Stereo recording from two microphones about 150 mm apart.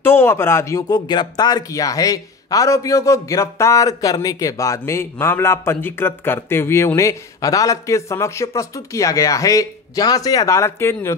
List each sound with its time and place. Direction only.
0.0 s speech: 15° left (ahead or behind)